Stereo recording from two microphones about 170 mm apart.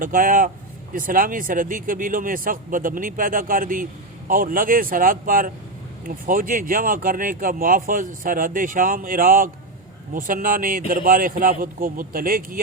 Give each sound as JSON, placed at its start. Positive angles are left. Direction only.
{"t": 0.0, "sound": "speech", "side_deg": -55}